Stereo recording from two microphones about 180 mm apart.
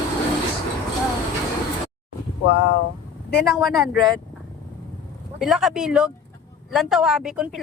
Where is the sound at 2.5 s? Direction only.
75° left (ahead or behind).